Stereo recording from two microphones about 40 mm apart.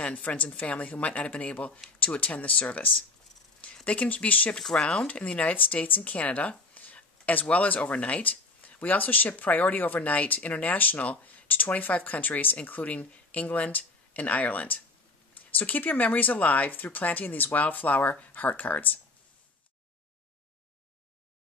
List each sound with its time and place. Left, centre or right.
0.0 s a woman's voice: left
4.6 s speech: centre; by 6.5 s left
6.7 s a sound: left
7.4 s speech: left
8.2 s speech: left